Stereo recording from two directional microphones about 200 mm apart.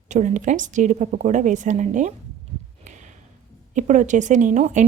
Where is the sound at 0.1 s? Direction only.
35° right (ahead or behind).